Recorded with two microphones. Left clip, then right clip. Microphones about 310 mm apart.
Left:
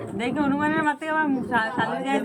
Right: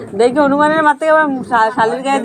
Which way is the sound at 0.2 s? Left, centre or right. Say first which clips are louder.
Right 14 dB; right.